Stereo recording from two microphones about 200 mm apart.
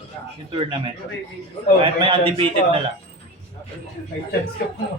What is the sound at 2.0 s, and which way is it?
Speech, 25° right (ahead or behind).